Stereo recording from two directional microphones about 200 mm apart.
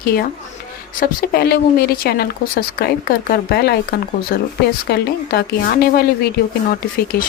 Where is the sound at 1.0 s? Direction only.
50° left (ahead or behind).